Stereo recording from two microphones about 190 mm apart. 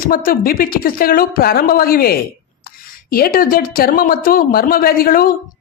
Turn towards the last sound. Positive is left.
turn(degrees=50)  # may be behind; listen again after turning